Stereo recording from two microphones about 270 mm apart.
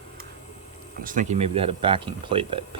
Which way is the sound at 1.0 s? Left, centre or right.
Right.